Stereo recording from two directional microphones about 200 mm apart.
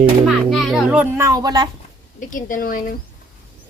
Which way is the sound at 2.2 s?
40° left (ahead or behind).